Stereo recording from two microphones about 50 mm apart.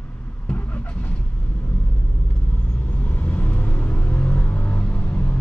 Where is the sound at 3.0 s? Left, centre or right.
Left.